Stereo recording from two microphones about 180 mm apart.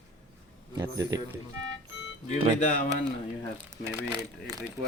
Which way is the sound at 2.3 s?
40° left (ahead or behind).